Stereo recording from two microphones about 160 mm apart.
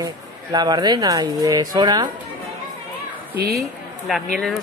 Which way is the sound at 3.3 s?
75° right (ahead or behind).